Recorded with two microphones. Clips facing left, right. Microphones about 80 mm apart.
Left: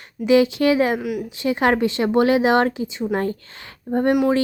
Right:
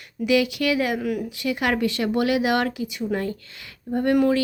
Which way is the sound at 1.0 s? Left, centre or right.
Centre.